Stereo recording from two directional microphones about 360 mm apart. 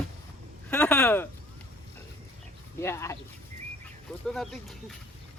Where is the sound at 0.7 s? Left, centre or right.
Centre.